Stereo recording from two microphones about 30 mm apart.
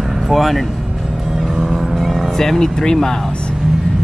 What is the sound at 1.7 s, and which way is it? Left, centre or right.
Vehicle, centre.